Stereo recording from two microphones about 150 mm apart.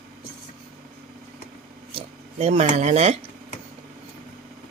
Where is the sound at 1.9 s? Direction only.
45° right (ahead or behind).